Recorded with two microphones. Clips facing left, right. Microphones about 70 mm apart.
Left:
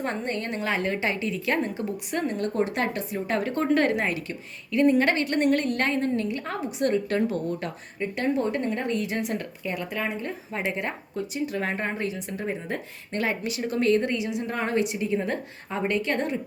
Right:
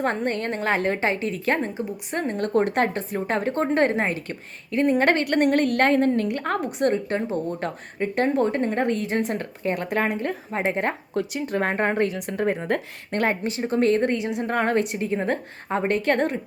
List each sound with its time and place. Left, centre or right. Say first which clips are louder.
0.0 s a woman's voice: right 5 dB; right
2.4 s a woman's voice: right 8 dB; right
10.5 s a woman's voice: right 5 dB; right
11.1 s speech: right 3 dB; right
11.5 s a woman's voice: right 10 dB; right